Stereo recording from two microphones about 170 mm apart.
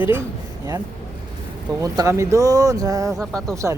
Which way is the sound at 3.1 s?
Centre (ahead or behind).